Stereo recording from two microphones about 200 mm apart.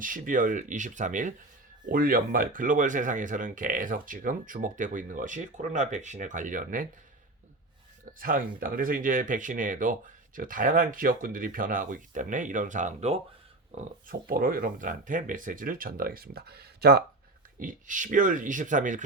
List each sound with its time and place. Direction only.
0.0 s speech: 40° right (ahead or behind)
8.2 s speech: 45° right (ahead or behind)
17.6 s speech: 40° right (ahead or behind)